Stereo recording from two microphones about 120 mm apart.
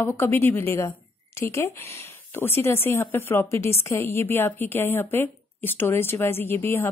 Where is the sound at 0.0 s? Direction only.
20° left (ahead or behind).